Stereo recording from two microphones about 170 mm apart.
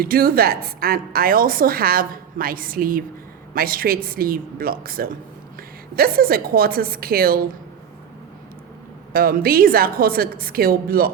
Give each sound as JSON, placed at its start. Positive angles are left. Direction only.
{"t": 0.0, "sound": "a woman's voice", "side_deg": -60}
{"t": 9.1, "sound": "a woman's voice", "side_deg": -60}